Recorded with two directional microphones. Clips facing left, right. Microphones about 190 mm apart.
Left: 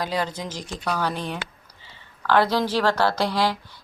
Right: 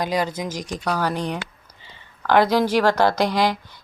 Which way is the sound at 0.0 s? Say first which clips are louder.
Right 3 dB; 10° right (ahead or behind).